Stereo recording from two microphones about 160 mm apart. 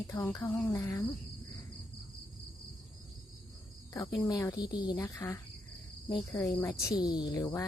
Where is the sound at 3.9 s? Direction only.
20° left (ahead or behind).